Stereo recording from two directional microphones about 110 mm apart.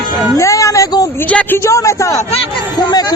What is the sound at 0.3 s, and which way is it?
Music, 30° left (ahead or behind).